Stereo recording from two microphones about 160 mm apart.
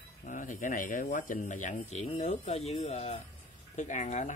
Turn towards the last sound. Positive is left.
turn(degrees=50)  # may be behind; listen again after turning